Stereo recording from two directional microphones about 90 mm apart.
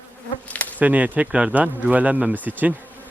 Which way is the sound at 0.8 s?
15° right (ahead or behind).